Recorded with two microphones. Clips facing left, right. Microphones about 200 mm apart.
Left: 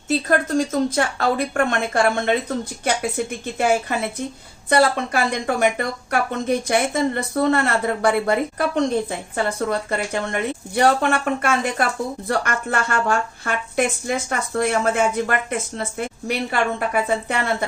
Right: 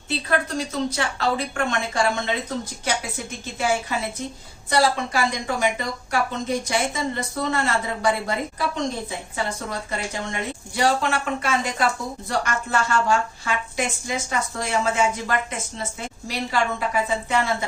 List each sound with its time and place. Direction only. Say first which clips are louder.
0.1 s a woman's voice: left 5 dB; 45° left (ahead or behind)